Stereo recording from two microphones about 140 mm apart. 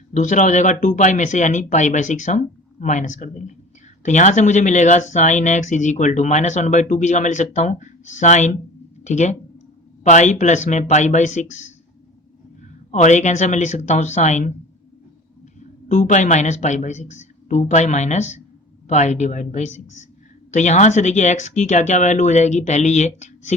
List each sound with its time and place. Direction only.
0.1 s speech: 60° left (ahead or behind)
12.9 s speech: 60° left (ahead or behind)
15.9 s speech: 60° left (ahead or behind)